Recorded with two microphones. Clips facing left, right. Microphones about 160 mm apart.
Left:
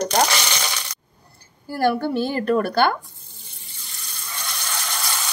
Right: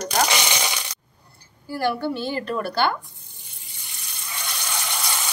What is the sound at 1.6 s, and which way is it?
A woman's voice, 45° left (ahead or behind).